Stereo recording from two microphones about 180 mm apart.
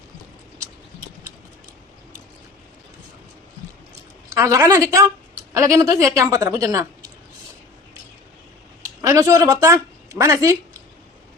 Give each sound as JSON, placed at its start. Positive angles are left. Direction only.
{"t": 4.3, "sound": "a woman's voice", "side_deg": -20}
{"t": 8.8, "sound": "speech", "side_deg": -15}